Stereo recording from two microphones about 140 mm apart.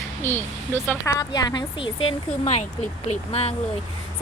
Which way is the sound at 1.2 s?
30° left (ahead or behind).